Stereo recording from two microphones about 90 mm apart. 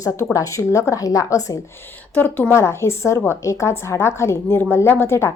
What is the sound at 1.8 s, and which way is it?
A woman's voice, 20° left (ahead or behind).